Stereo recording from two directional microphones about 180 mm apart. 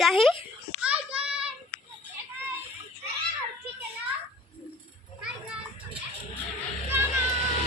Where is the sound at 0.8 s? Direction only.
5° right (ahead or behind).